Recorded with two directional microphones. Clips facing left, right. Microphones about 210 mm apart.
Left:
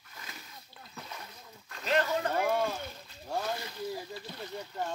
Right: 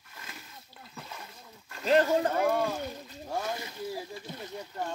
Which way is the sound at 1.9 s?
35° right (ahead or behind).